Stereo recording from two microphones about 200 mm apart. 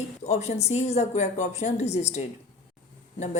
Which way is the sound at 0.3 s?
35° left (ahead or behind).